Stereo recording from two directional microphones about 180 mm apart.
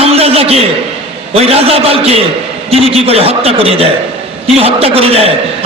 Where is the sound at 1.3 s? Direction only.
35° right (ahead or behind).